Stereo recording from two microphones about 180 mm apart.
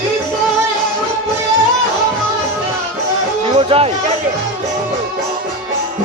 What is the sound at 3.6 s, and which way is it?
Chatter, 30° right (ahead or behind).